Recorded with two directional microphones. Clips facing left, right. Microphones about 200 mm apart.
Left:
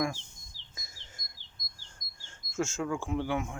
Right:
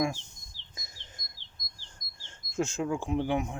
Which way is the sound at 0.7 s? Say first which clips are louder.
Right 2 dB; 20° right (ahead or behind).